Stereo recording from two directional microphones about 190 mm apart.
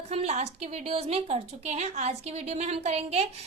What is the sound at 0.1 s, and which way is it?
A woman's voice, 35° right (ahead or behind).